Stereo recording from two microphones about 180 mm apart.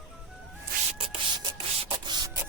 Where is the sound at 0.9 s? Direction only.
30° right (ahead or behind).